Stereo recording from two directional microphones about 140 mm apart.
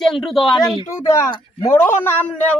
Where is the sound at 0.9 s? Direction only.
20° left (ahead or behind).